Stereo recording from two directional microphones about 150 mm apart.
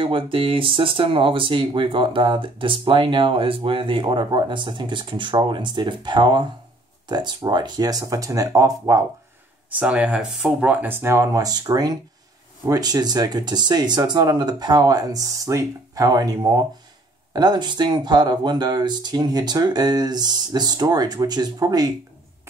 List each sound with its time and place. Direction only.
0.0 s speech: 35° right (ahead or behind)
9.8 s speech: 5° right (ahead or behind); by 21.9 s 25° right (ahead or behind)